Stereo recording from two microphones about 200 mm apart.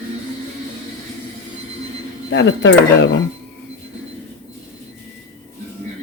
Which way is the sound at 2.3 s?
60° left (ahead or behind).